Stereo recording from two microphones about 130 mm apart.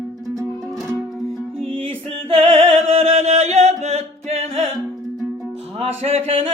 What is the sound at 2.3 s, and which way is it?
Chant, 55° right (ahead or behind).